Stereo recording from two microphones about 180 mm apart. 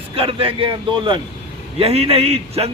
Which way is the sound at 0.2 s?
30° right (ahead or behind).